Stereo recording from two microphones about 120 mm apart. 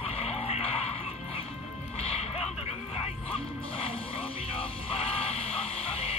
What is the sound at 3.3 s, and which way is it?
Music, 55° left (ahead or behind).